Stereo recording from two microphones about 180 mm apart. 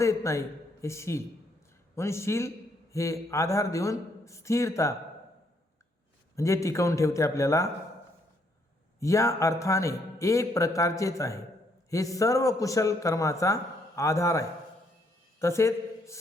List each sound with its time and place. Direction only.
0.0 s a man's voice: 15° left (ahead or behind)
6.3 s a man's voice: 15° left (ahead or behind)
9.0 s a man's voice: 15° left (ahead or behind)
15.4 s a sound: 15° left (ahead or behind)